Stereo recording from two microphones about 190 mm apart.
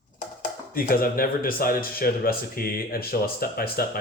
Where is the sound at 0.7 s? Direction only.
50° left (ahead or behind).